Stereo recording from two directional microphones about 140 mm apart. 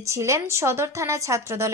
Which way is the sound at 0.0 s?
20° right (ahead or behind).